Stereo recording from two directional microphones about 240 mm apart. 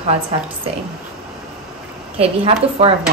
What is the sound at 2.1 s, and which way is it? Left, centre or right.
Speech, right.